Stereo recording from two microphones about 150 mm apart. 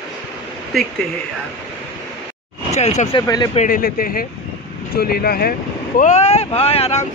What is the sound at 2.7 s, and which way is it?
Speech, 50° left (ahead or behind).